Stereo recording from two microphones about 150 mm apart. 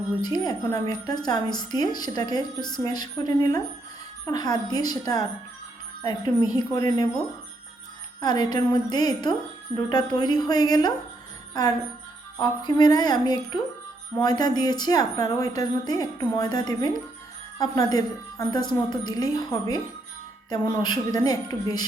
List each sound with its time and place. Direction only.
0.2 s a woman's voice: 25° left (ahead or behind)
8.2 s a woman's voice: 25° left (ahead or behind)